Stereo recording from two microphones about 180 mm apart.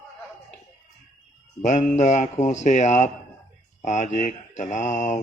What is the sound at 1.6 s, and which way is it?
Speech, 40° left (ahead or behind).